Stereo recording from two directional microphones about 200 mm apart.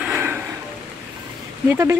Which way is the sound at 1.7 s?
15° right (ahead or behind).